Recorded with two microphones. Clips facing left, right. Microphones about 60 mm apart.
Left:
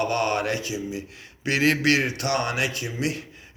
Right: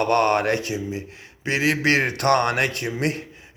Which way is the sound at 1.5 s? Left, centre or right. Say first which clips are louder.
Right 1 dB; right.